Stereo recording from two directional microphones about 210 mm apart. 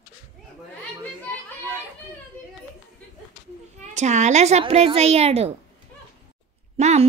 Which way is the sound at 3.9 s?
35° right (ahead or behind).